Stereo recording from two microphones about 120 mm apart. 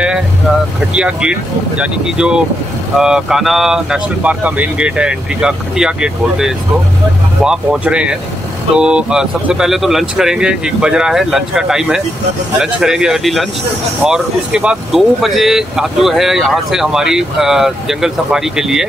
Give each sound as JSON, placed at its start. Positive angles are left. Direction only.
{"t": 0.9, "sound": "speech", "side_deg": -10}